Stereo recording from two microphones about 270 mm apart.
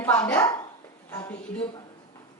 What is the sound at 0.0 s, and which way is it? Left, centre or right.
A woman's voice, centre.